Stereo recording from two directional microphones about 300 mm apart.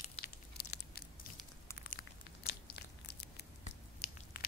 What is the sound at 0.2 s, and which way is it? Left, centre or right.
Tearing, left.